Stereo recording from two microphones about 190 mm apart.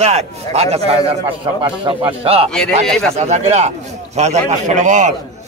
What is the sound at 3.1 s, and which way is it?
A man's voice, 35° right (ahead or behind).